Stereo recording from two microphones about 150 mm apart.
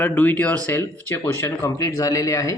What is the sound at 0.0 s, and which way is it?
A man's voice, 10° left (ahead or behind).